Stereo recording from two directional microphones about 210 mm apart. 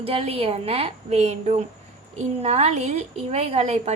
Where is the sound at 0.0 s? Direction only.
25° right (ahead or behind).